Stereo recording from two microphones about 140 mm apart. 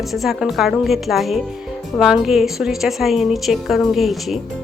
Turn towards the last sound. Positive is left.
turn(degrees=0)  # may be behind; listen again after turning